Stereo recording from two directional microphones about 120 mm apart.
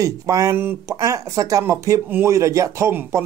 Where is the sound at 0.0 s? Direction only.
30° right (ahead or behind).